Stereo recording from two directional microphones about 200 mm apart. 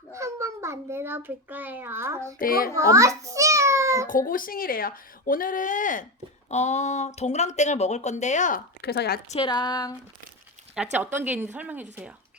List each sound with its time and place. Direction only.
0.1 s a child's voice: 15° right (ahead or behind)
2.4 s speech: 45° left (ahead or behind)
2.7 s a sound: 15° right (ahead or behind)
4.3 s speech: 45° left (ahead or behind)
9.3 s speech: 25° left (ahead or behind)
10.9 s speech: 10° right (ahead or behind)